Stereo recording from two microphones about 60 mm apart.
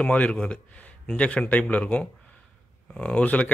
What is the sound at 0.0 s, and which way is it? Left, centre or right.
Speech, centre.